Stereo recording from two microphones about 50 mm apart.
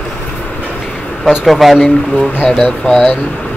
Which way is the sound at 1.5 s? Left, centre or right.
Centre.